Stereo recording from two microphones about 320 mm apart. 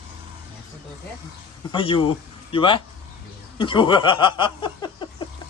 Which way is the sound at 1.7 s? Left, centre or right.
Centre.